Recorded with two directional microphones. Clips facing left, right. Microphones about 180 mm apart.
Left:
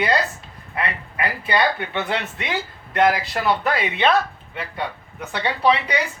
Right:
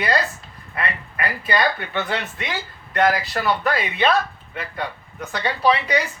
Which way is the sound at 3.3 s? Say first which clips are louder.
Even; 20° left (ahead or behind).